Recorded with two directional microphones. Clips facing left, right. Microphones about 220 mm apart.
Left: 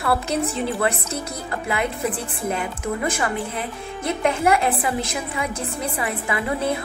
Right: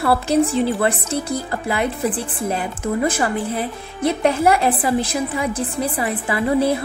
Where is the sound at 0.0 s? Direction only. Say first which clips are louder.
Right 4 dB; 30° right (ahead or behind).